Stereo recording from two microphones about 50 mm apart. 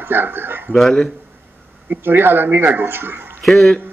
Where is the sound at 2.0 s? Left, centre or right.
Right.